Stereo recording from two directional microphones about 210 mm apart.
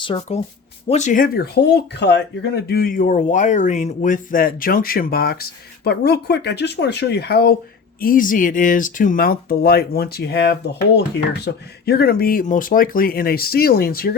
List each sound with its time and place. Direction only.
0.0 s speech: 25° left (ahead or behind); by 14.2 s 45° left (ahead or behind)